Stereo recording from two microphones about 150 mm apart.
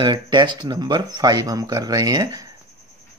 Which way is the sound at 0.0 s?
30° right (ahead or behind).